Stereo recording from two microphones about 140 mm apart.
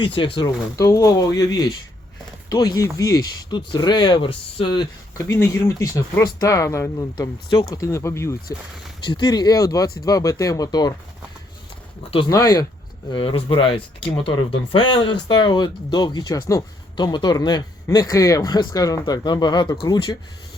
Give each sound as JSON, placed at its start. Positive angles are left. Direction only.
{"t": 0.0, "sound": "speech", "side_deg": 40}
{"t": 0.4, "sound": "speech", "side_deg": 20}
{"t": 5.1, "sound": "speech", "side_deg": 25}
{"t": 9.0, "sound": "speech", "side_deg": 30}
{"t": 12.3, "sound": "speech", "side_deg": 25}
{"t": 13.1, "sound": "speech", "side_deg": 35}